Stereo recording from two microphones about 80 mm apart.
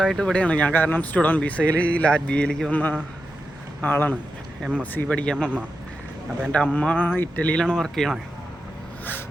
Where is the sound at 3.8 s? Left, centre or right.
Left.